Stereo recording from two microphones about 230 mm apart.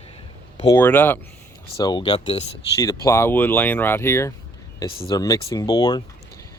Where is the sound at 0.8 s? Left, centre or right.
Centre.